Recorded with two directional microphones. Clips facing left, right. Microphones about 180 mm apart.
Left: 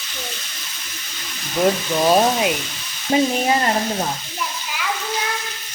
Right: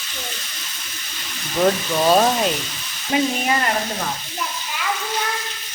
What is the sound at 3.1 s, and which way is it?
Frying, 30° left (ahead or behind).